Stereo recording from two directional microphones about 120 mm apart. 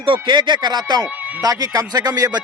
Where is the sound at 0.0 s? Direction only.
45° right (ahead or behind).